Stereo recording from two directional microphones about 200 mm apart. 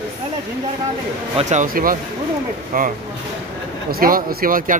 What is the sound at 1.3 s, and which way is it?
Speech, 40° right (ahead or behind).